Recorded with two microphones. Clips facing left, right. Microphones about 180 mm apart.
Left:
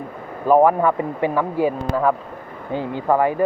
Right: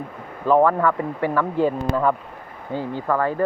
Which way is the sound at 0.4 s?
15° left (ahead or behind).